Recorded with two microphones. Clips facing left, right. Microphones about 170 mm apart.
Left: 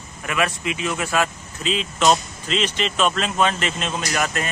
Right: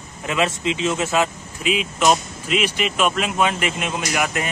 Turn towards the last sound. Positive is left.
turn(degrees=-15)  # may be behind; listen again after turning